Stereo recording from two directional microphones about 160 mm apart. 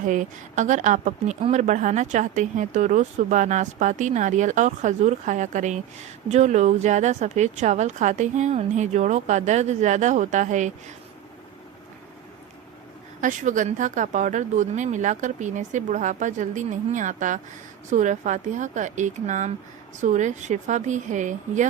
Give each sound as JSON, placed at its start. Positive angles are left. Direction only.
{"t": 0.0, "sound": "speech", "side_deg": -55}
{"t": 13.2, "sound": "speech", "side_deg": -50}